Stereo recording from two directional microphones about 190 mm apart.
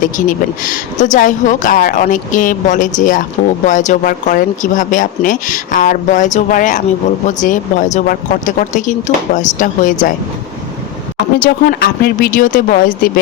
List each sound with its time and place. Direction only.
0.0 s speech: 45° left (ahead or behind)
11.4 s speech: 55° left (ahead or behind)